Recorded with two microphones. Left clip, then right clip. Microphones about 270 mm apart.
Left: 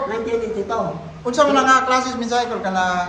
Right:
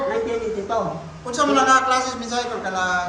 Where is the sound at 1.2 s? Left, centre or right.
Left.